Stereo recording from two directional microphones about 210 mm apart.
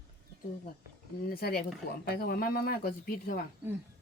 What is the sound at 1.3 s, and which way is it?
Speech, 45° left (ahead or behind).